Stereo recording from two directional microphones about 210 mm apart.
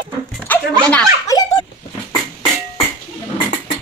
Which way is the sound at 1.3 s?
20° left (ahead or behind).